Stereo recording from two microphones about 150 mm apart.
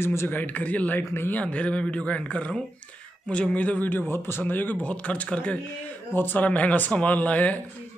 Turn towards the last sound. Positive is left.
turn(degrees=10)  # may be behind; listen again after turning